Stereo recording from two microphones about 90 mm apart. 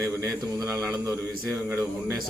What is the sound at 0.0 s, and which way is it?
Speech, 35° right (ahead or behind).